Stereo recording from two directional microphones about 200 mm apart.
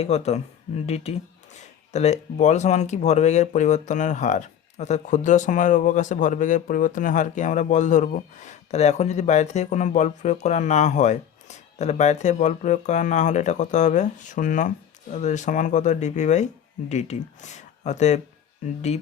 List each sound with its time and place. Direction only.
0.0 s speech: 35° left (ahead or behind)